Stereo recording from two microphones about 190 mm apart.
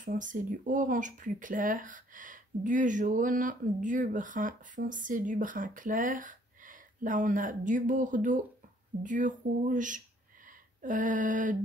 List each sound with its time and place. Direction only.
0.0 s speech: 45° right (ahead or behind)